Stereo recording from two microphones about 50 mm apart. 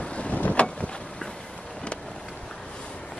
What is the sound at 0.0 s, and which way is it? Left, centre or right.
Boat, left.